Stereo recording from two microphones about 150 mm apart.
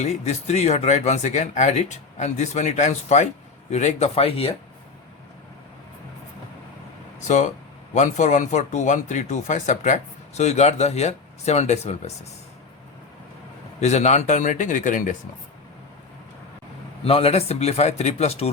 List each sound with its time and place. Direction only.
0.0 s speech: 50° left (ahead or behind)
7.2 s speech: 55° left (ahead or behind)
13.8 s speech: 50° left (ahead or behind)
17.0 s speech: 40° left (ahead or behind)